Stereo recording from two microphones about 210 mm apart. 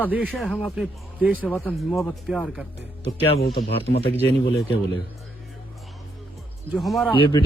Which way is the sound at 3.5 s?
50° left (ahead or behind).